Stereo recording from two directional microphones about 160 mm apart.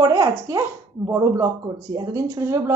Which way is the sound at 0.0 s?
20° right (ahead or behind).